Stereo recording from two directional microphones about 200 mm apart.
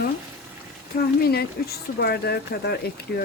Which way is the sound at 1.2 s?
50° left (ahead or behind).